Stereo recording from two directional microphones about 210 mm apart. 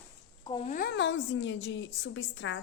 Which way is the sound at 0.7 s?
45° left (ahead or behind).